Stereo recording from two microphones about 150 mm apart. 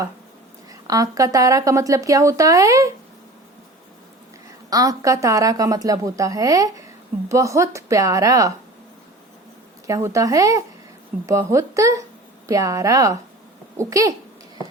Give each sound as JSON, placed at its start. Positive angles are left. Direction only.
{"t": 0.7, "sound": "speech", "side_deg": -25}
{"t": 4.7, "sound": "speech", "side_deg": -25}
{"t": 9.8, "sound": "speech", "side_deg": -20}